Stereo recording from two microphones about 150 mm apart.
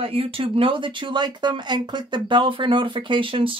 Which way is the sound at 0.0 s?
40° right (ahead or behind).